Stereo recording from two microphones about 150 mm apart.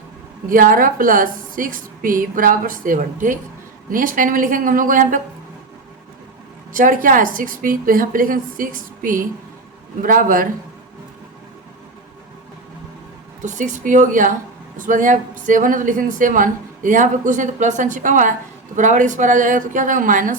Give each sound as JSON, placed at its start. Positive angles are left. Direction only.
{"t": 0.4, "sound": "speech", "side_deg": -65}
{"t": 6.7, "sound": "a man's voice", "side_deg": -60}
{"t": 13.4, "sound": "speech", "side_deg": -55}